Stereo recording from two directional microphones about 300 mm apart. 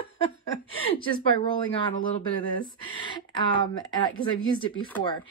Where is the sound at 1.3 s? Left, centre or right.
Centre.